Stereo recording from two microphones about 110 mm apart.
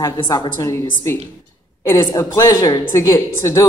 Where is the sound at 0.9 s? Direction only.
20° left (ahead or behind).